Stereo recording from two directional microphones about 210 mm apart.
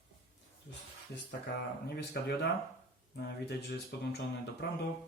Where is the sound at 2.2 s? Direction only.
50° left (ahead or behind).